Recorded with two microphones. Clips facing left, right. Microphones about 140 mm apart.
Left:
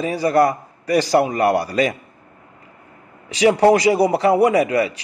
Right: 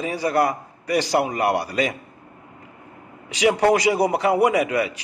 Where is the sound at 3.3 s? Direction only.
35° left (ahead or behind).